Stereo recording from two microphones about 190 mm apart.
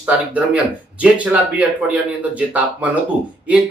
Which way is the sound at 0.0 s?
5° right (ahead or behind).